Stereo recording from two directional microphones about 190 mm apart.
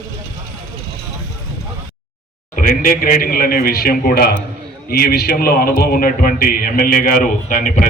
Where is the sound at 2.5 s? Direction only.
45° left (ahead or behind).